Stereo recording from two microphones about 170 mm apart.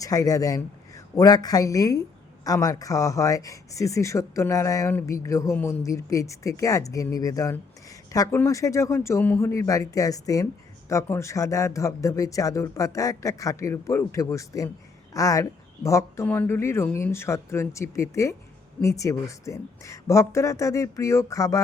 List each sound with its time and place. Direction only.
0.0 s a man's voice: 20° left (ahead or behind)